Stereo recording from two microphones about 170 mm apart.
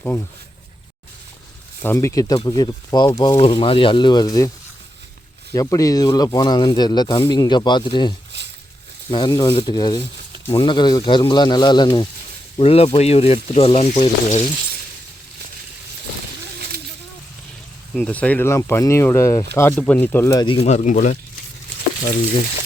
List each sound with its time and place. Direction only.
1.8 s speech: 15° left (ahead or behind)
5.5 s speech: 20° left (ahead or behind)
8.3 s a sound: 85° right
9.0 s speech: 25° left (ahead or behind)
17.9 s speech: 5° left (ahead or behind); by 20.7 s 30° left (ahead or behind)
20.7 s speech: 45° left (ahead or behind)